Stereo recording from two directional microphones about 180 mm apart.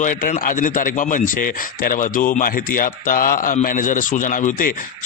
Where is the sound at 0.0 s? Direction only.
45° left (ahead or behind).